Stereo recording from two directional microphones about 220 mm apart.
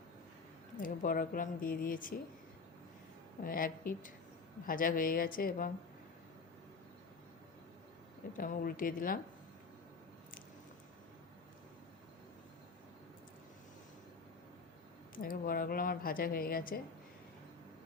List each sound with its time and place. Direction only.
0.8 s speech: 40° left (ahead or behind)
3.4 s speech: 40° left (ahead or behind)
8.4 s speech: 40° left (ahead or behind)
15.1 s speech: 40° left (ahead or behind)